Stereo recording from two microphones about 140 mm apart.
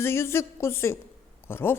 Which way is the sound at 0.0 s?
20° left (ahead or behind).